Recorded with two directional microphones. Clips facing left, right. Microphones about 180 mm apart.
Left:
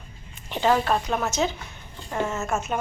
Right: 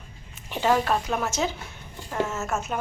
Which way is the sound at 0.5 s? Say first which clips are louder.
Left 1 dB; 10° right (ahead or behind).